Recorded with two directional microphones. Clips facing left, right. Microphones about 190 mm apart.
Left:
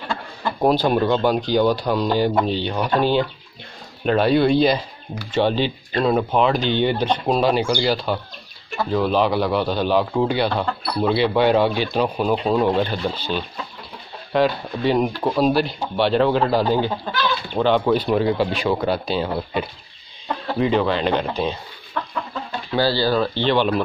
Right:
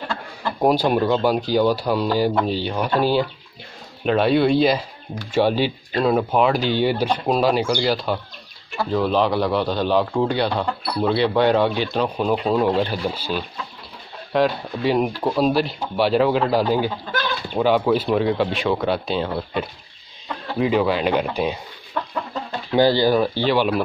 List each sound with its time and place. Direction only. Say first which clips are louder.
0.6 s speech: even; 10° right (ahead or behind); by 10.5 s 5° left (ahead or behind)
10.5 s speech: even; 15° right (ahead or behind)
11.1 s speech: even; 5° left (ahead or behind); by 21.5 s 10° right (ahead or behind)
22.8 s speech: right 3 dB; 15° right (ahead or behind)